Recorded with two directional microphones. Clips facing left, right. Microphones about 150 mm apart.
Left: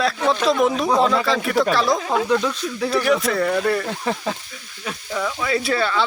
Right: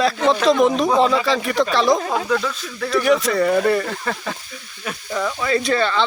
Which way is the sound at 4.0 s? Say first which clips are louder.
Left 2 dB; 10° left (ahead or behind).